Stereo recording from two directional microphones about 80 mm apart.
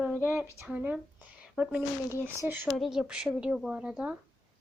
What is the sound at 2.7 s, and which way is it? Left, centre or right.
Speech, centre.